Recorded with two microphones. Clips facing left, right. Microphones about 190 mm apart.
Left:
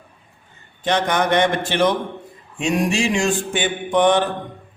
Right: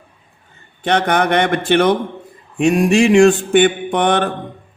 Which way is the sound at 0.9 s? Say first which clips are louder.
Right 3 dB; 60° right (ahead or behind).